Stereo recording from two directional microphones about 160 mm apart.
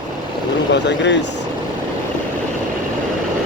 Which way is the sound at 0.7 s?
90° left.